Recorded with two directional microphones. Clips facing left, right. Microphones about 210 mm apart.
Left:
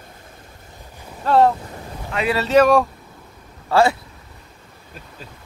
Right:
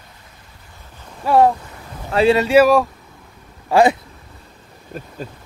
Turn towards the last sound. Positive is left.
turn(degrees=-45)  # may be behind; listen again after turning